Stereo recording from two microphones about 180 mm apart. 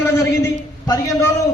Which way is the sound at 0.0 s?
15° left (ahead or behind).